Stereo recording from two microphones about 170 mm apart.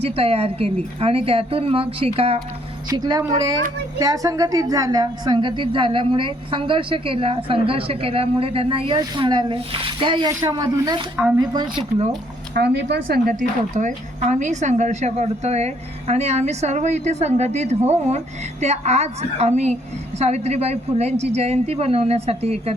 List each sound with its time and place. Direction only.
0.0 s a woman's voice: 35° right (ahead or behind)
2.9 s a woman's voice: 25° right (ahead or behind)
12.5 s speech: 80° right; by 13.3 s 65° right (ahead or behind)
13.7 s a woman's voice: 45° right (ahead or behind)